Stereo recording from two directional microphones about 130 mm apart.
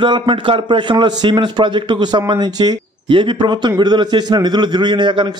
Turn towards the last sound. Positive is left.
turn(degrees=-35)  # may be behind; listen again after turning